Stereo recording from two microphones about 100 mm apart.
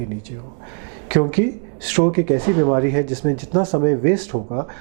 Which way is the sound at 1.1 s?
15° right (ahead or behind).